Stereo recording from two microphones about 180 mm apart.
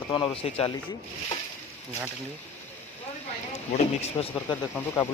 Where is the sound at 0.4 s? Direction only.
35° left (ahead or behind).